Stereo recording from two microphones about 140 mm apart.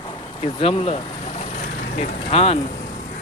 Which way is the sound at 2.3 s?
45° left (ahead or behind).